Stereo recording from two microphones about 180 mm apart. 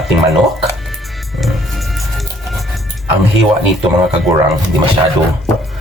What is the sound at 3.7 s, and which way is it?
Speech, centre (ahead or behind).